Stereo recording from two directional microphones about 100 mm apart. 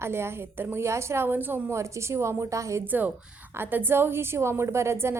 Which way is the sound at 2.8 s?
20° right (ahead or behind).